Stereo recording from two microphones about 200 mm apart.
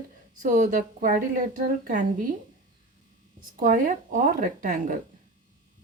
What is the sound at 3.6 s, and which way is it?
A woman's voice, 40° right (ahead or behind).